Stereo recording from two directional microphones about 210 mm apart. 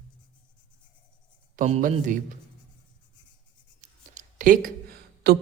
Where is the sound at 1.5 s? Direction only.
35° right (ahead or behind).